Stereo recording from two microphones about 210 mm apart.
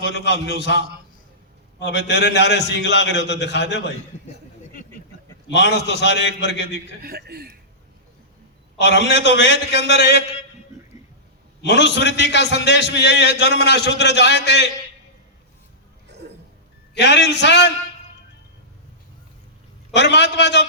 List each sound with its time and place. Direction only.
0.0 s a man's voice: 55° left (ahead or behind)
5.5 s a man's voice: 55° left (ahead or behind)
7.0 s a man's voice: 45° right (ahead or behind)
8.8 s a man's voice: 55° left (ahead or behind)
11.6 s a man's voice: 55° left (ahead or behind)
16.9 s a man's voice: 55° left (ahead or behind)
19.9 s a man's voice: 55° left (ahead or behind)